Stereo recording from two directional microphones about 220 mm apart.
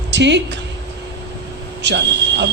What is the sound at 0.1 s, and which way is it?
Speech, 55° right (ahead or behind).